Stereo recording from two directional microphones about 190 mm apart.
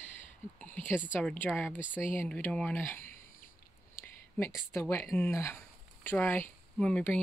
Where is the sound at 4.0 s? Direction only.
15° left (ahead or behind).